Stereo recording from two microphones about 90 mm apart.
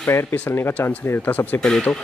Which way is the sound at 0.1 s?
25° left (ahead or behind).